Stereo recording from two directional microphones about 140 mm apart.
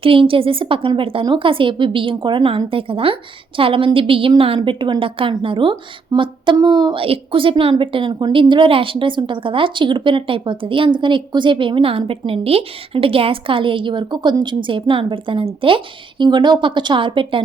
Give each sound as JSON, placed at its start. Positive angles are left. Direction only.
{"t": 0.0, "sound": "a woman's voice", "side_deg": -40}
{"t": 7.0, "sound": "a woman's voice", "side_deg": -40}